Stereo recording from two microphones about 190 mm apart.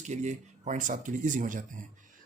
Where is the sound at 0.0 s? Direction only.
40° right (ahead or behind).